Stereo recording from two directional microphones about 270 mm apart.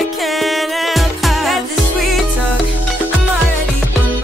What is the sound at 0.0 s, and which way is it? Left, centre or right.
Music, centre.